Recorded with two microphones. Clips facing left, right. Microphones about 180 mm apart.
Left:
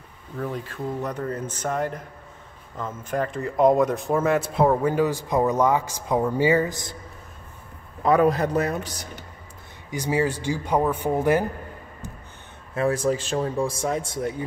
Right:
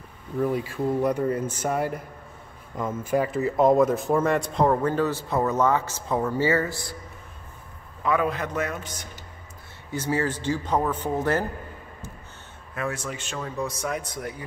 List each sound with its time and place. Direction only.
0.4 s a man's voice: 10° right (ahead or behind); by 7.0 s 20° left (ahead or behind)
8.0 s a man's voice: 40° left (ahead or behind)
9.8 s a man's voice: 15° left (ahead or behind)
12.7 s speech: 35° left (ahead or behind)